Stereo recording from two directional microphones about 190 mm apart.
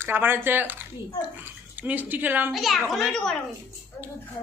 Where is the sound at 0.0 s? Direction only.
10° right (ahead or behind).